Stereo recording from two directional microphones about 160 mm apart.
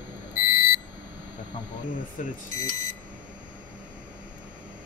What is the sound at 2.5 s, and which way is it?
Speech, 45° right (ahead or behind).